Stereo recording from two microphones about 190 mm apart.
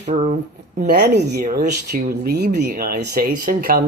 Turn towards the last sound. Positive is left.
turn(degrees=-50)  # may be behind; listen again after turning